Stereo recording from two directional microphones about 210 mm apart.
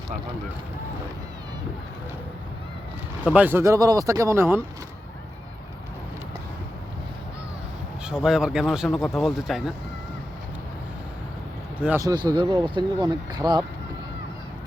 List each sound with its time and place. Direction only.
3.2 s speech: 5° right (ahead or behind)
8.0 s speech: 5° right (ahead or behind)
11.8 s speech: 10° right (ahead or behind)